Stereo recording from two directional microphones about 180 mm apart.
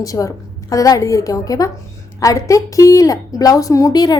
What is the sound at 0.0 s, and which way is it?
A woman's voice, 20° left (ahead or behind).